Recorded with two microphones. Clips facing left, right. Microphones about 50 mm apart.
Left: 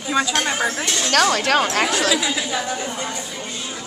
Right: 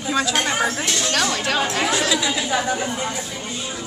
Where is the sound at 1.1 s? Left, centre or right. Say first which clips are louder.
Left 7 dB; left.